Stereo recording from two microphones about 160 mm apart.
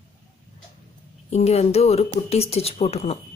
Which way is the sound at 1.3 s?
40° left (ahead or behind).